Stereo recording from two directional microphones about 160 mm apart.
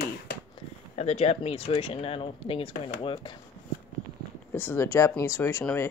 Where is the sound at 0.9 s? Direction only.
40° left (ahead or behind).